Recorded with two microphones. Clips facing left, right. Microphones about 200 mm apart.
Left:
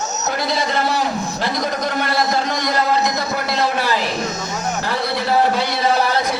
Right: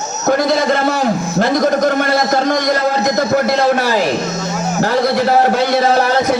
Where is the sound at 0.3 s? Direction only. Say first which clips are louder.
Right 9 dB; 50° right (ahead or behind).